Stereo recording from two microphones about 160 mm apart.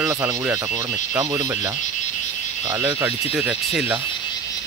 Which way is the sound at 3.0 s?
10° right (ahead or behind).